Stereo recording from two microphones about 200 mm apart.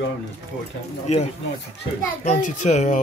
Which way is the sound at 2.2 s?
40° left (ahead or behind).